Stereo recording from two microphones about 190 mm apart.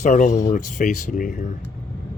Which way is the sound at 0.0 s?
40° left (ahead or behind).